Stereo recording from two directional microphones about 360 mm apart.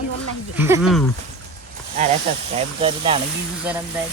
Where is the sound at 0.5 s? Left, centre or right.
Centre.